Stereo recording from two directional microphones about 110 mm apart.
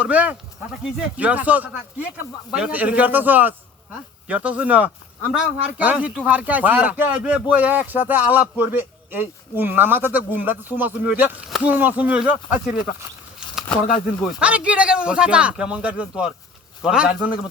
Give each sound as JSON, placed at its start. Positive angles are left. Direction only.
{"t": 0.0, "sound": "speech", "side_deg": -15}
{"t": 14.2, "sound": "speech", "side_deg": -10}